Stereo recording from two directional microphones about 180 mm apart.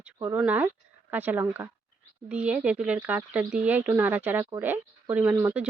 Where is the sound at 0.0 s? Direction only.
15° right (ahead or behind).